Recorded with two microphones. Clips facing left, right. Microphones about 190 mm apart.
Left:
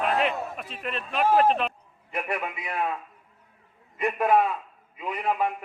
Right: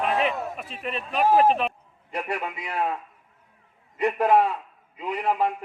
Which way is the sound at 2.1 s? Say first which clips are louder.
Right 1 dB; 35° right (ahead or behind).